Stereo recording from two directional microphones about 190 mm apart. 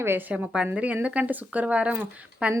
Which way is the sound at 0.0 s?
10° right (ahead or behind).